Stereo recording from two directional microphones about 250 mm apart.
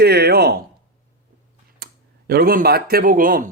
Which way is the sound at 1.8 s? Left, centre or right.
Right.